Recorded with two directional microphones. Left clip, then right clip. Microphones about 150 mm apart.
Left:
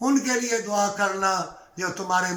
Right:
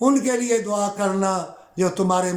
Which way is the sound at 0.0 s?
25° right (ahead or behind).